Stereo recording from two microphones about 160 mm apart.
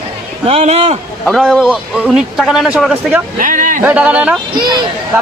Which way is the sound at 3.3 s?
55° right (ahead or behind).